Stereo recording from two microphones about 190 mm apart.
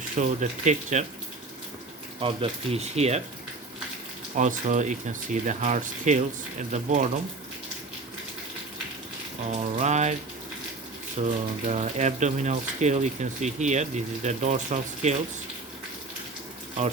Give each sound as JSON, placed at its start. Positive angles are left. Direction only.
{"t": 0.2, "sound": "speech", "side_deg": -40}
{"t": 2.2, "sound": "speech", "side_deg": -30}
{"t": 4.4, "sound": "speech", "side_deg": -40}
{"t": 9.5, "sound": "speech", "side_deg": -40}
{"t": 11.2, "sound": "speech", "side_deg": -35}